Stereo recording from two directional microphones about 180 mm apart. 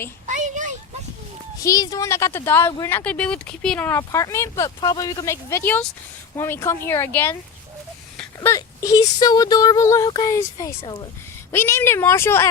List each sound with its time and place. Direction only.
0.3 s a sound: 45° right (ahead or behind)
1.6 s speech: 20° left (ahead or behind)
8.4 s speech: 20° left (ahead or behind)